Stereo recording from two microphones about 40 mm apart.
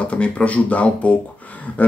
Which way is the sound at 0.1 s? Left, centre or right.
Left.